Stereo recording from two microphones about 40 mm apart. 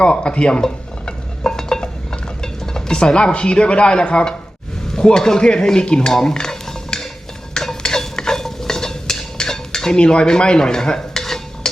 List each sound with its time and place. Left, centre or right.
0.0 s stir: left
2.4 s dishes: centre
4.9 s speech: centre
5.5 s stir: centre
6.1 s dishes: centre
7.8 s stir: centre